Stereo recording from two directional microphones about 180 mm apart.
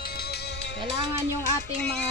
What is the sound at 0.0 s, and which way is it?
Music, 60° left (ahead or behind).